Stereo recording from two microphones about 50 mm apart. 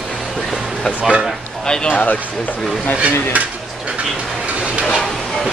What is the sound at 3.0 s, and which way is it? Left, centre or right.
Speech, right.